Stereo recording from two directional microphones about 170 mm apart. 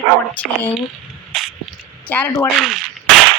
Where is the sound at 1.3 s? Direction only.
Centre (ahead or behind).